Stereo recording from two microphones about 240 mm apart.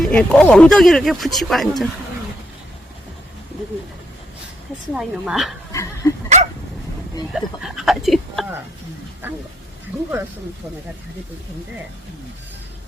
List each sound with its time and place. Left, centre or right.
0.0 s speech: centre
4.9 s speech: centre
5.7 s dog: centre
6.2 s dog: right
7.3 s speech: centre